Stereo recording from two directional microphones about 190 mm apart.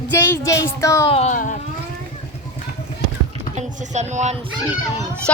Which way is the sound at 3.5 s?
35° right (ahead or behind).